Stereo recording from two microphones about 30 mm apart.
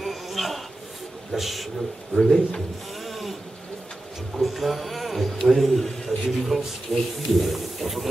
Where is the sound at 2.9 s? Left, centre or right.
Centre.